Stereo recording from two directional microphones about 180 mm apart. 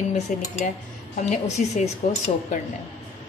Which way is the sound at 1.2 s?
40° left (ahead or behind).